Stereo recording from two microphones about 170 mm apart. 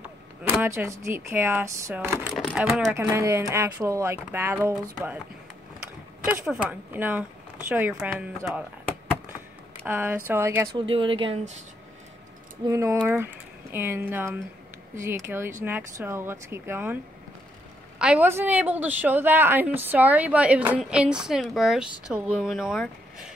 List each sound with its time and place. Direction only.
0.4 s a woman's voice: 10° right (ahead or behind)
6.2 s a woman's voice: 10° right (ahead or behind)
9.8 s a woman's voice: 10° right (ahead or behind)
10.7 s speech: 30° right (ahead or behind)
12.6 s a woman's voice: 15° right (ahead or behind)